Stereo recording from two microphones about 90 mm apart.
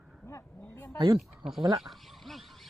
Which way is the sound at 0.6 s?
20° left (ahead or behind).